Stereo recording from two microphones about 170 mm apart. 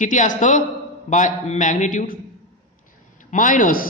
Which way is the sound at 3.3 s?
50° left (ahead or behind).